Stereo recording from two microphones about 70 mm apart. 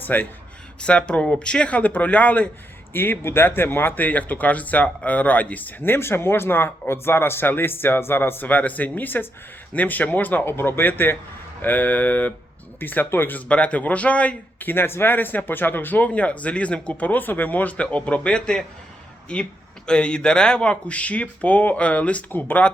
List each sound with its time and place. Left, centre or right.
0.0 s speech: left
0.8 s speech: centre
2.9 s speech: left
13.5 s speech: centre